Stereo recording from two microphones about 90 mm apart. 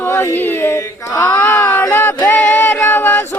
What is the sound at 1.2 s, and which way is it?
Speech, 20° left (ahead or behind).